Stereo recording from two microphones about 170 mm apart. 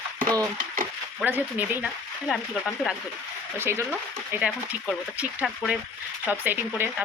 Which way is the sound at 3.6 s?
15° right (ahead or behind).